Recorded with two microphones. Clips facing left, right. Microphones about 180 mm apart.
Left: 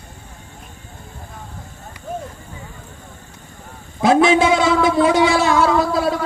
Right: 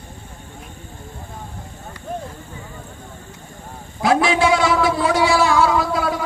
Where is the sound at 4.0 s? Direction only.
20° left (ahead or behind).